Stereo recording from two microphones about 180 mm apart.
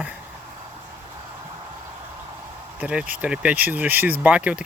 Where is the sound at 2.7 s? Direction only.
5° right (ahead or behind).